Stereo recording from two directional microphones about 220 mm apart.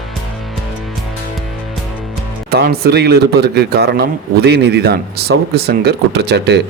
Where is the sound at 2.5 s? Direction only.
45° right (ahead or behind).